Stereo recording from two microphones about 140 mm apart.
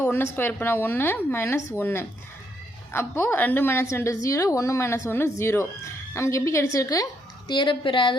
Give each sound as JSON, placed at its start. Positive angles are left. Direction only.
{"t": 0.0, "sound": "a woman's voice", "side_deg": 15}